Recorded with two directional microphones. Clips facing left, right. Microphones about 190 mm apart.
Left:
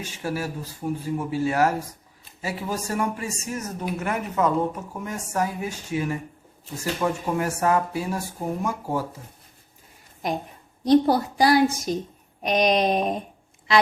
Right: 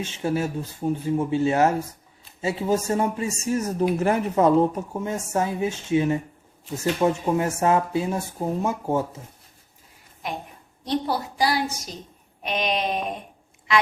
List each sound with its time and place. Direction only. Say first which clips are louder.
0.0 s speech: right 4 dB; 25° right (ahead or behind)
10.8 s a woman's voice: left 8 dB; 45° left (ahead or behind)
12.4 s a sound: left 5 dB; 40° left (ahead or behind)